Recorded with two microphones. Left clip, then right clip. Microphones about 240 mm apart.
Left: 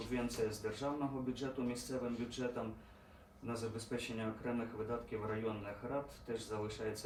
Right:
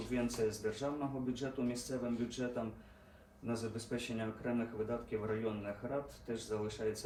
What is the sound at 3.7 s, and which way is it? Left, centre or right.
Speech, centre.